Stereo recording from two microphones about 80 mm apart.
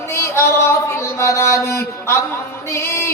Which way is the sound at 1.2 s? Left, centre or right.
Left.